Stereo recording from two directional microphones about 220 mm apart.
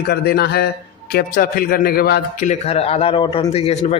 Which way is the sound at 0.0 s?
45° left (ahead or behind).